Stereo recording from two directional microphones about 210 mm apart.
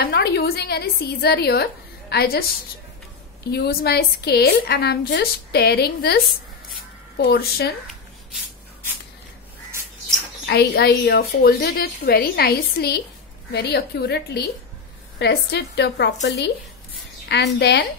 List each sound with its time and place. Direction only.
0.0 s speech: 50° left (ahead or behind)
3.5 s a woman's voice: 50° left (ahead or behind)
10.4 s a woman's voice: 50° left (ahead or behind)